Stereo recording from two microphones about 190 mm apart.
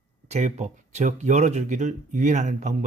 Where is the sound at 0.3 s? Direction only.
40° right (ahead or behind).